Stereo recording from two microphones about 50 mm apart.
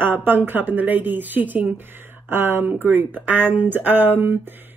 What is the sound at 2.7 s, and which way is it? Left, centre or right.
A woman's voice, right.